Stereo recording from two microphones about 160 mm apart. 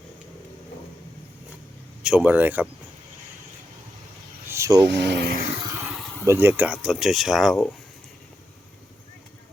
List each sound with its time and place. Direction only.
2.0 s speech: 10° right (ahead or behind)
4.4 s vehicle: 20° right (ahead or behind)
4.9 s speech: 90° right
6.2 s speech: 15° right (ahead or behind)